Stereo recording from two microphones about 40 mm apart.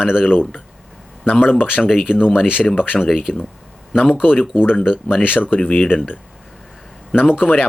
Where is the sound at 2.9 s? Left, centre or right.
Centre.